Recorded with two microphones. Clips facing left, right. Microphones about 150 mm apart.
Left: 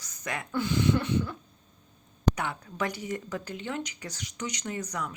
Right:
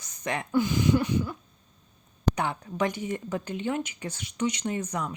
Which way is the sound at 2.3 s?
25° right (ahead or behind).